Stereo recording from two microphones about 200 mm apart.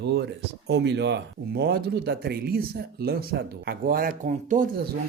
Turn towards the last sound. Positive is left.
turn(degrees=-40)  # may be behind; listen again after turning